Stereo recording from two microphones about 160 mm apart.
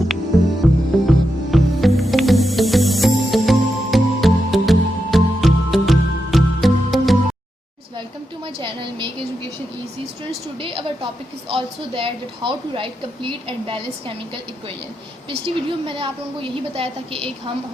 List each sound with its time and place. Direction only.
0.6 s music: centre (ahead or behind)
8.6 s a sound: 35° right (ahead or behind)
10.6 s a woman's voice: 35° right (ahead or behind)
15.4 s a woman's voice: 35° right (ahead or behind)